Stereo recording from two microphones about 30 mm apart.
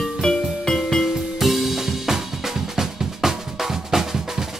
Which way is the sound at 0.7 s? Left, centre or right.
Centre.